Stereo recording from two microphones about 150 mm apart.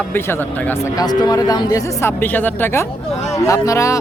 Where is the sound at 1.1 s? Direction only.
25° left (ahead or behind).